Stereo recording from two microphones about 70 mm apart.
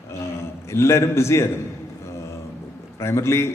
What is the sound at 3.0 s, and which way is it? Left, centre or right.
Speech, left.